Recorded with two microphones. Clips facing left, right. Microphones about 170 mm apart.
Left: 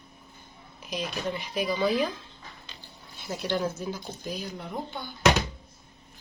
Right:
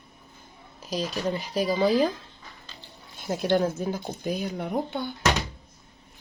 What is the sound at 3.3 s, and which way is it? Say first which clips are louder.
Speech: right 6 dB; 55° right (ahead or behind).